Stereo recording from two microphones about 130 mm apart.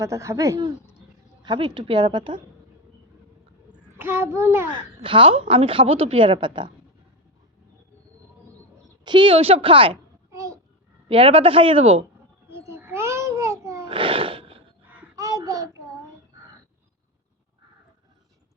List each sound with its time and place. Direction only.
0.0 s speech: 25° right (ahead or behind)
1.4 s a woman's voice: 40° right (ahead or behind)
3.9 s a child's voice: 15° right (ahead or behind)
5.0 s a woman's voice: 45° right (ahead or behind)
9.0 s a woman's voice: 40° right (ahead or behind)
10.3 s a sound: 25° right (ahead or behind)
11.1 s a woman's voice: 45° right (ahead or behind)
12.5 s babbling: 20° right (ahead or behind)
13.8 s music: 45° right (ahead or behind)
15.1 s a sound: 25° right (ahead or behind)